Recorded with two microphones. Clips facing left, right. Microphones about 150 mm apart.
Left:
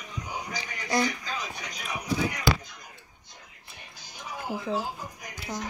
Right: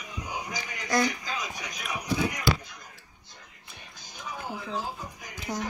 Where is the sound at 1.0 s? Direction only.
10° right (ahead or behind).